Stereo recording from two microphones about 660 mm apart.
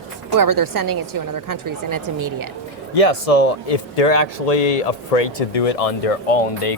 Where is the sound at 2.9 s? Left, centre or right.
Left.